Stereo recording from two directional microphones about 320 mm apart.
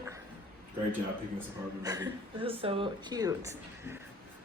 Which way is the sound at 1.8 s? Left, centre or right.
Centre.